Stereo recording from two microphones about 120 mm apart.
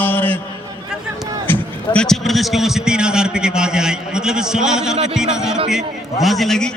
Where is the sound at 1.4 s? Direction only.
15° left (ahead or behind).